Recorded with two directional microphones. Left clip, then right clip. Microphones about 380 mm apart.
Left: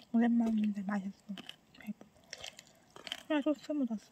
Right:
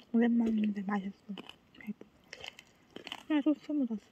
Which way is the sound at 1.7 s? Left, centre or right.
Centre.